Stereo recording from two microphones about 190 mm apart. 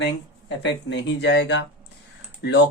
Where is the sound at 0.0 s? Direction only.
70° left (ahead or behind).